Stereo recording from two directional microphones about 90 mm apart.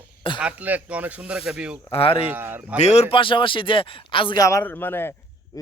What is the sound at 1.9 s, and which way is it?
Speech, 90° left.